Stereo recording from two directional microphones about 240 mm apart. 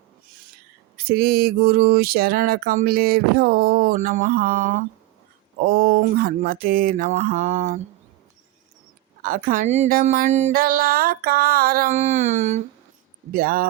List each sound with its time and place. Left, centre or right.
0.9 s mantra: right
9.2 s mantra: right